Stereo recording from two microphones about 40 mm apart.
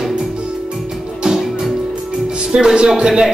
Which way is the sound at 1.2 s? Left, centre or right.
Centre.